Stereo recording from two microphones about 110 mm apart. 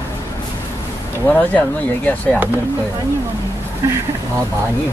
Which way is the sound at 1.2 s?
15° left (ahead or behind).